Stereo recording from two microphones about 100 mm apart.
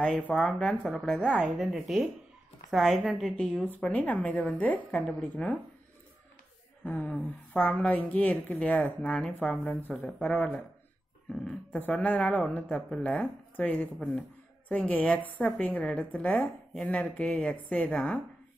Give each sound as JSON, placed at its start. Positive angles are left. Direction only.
{"t": 0.0, "sound": "a woman's voice", "side_deg": 10}
{"t": 6.8, "sound": "a woman's voice", "side_deg": 15}